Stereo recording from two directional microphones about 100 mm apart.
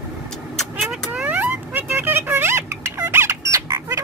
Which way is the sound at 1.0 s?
15° right (ahead or behind).